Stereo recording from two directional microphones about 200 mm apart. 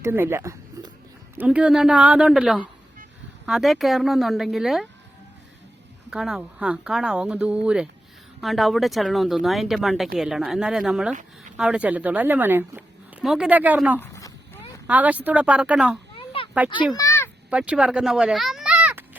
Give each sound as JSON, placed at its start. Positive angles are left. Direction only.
{"t": 0.0, "sound": "speech", "side_deg": -10}
{"t": 6.1, "sound": "speech", "side_deg": -5}
{"t": 11.1, "sound": "speech", "side_deg": -40}
{"t": 11.5, "sound": "a woman's voice", "side_deg": -5}
{"t": 14.0, "sound": "a sound", "side_deg": 15}
{"t": 14.8, "sound": "a woman's voice", "side_deg": -5}
{"t": 16.1, "sound": "a sound", "side_deg": 25}
{"t": 16.9, "sound": "a sound", "side_deg": 15}
{"t": 17.5, "sound": "a child's voice", "side_deg": -5}